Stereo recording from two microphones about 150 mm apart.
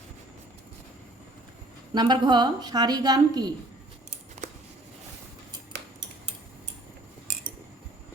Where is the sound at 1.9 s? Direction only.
30° right (ahead or behind).